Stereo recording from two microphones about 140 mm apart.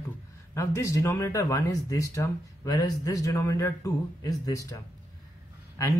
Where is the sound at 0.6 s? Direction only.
25° left (ahead or behind).